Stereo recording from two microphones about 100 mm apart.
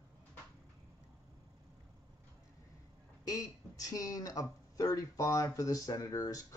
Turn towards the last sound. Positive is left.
turn(degrees=35)  # may be behind; listen again after turning